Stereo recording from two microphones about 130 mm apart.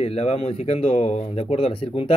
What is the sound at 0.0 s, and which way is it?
A man's voice, 50° left (ahead or behind).